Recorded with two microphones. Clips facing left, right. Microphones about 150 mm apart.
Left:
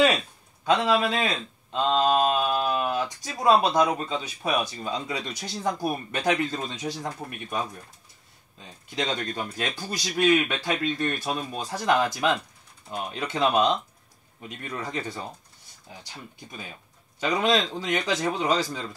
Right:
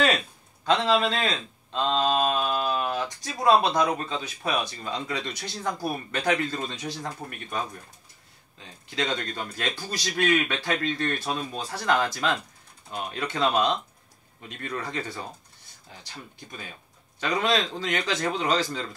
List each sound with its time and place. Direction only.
0.7 s speech: 10° left (ahead or behind)
8.9 s speech: 15° left (ahead or behind)
17.2 s speech: 15° left (ahead or behind)